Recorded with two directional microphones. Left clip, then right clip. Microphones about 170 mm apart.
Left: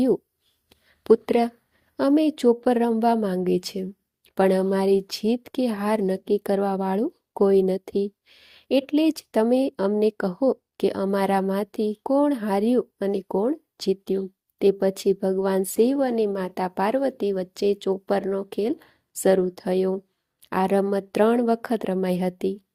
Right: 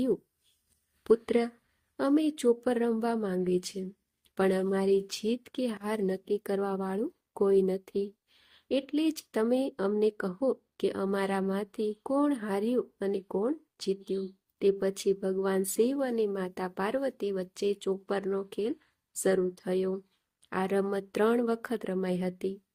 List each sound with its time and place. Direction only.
1.0 s a woman's voice: 35° left (ahead or behind)